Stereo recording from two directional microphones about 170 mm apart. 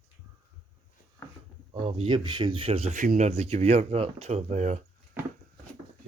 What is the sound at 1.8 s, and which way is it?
Speech, 35° right (ahead or behind).